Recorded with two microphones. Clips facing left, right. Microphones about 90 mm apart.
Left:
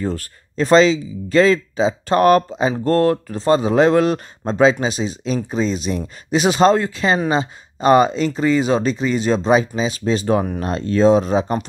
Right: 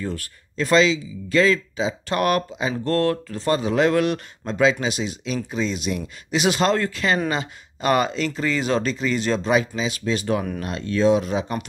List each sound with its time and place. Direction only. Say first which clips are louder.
0.0 s speech: left 5 dB; 35° left (ahead or behind)
2.8 s speech: left 4 dB; 25° left (ahead or behind)